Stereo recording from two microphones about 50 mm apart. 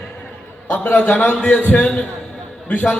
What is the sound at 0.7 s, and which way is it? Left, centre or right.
Speech, left.